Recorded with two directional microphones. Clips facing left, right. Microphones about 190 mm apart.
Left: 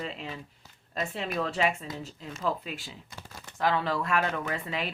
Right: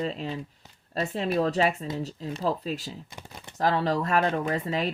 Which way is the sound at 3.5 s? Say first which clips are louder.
Right 3 dB; 40° right (ahead or behind).